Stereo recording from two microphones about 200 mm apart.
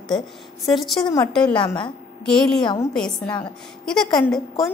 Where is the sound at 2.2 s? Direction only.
5° left (ahead or behind).